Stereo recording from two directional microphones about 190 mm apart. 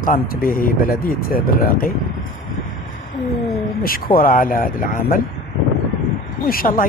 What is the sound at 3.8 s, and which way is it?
Speech, 50° left (ahead or behind).